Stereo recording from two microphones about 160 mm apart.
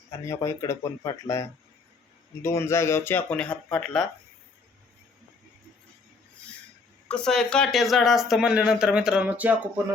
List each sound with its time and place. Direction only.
0.2 s speech: 20° left (ahead or behind)
7.1 s speech: 5° left (ahead or behind); by 9.9 s 15° right (ahead or behind)